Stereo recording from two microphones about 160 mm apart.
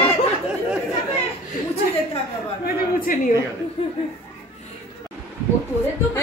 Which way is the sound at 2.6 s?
65° left (ahead or behind).